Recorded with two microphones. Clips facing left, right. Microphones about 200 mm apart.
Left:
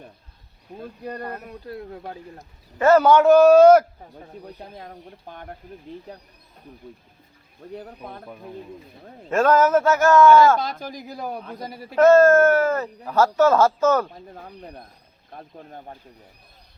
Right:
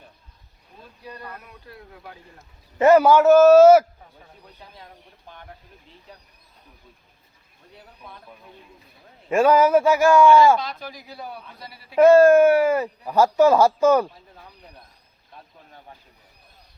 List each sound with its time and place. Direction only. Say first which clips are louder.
0.8 s speech: left 8 dB; 50° left (ahead or behind)
2.7 s speech: right 1 dB; 15° right (ahead or behind)
4.4 s speech: left 5 dB; 50° left (ahead or behind)
7.8 s speech: left 4 dB; 50° left (ahead or behind)
9.3 s speech: right 1 dB; 10° right (ahead or behind)
10.6 s speech: left 4 dB; 45° left (ahead or behind)
11.9 s speech: right 1 dB; 10° right (ahead or behind)
14.3 s speech: left 8 dB; 50° left (ahead or behind)